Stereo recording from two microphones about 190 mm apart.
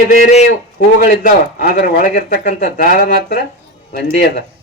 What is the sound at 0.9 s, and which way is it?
Speech, 50° left (ahead or behind).